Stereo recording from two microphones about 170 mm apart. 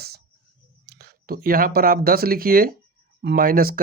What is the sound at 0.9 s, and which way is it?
Speech, 60° right (ahead or behind).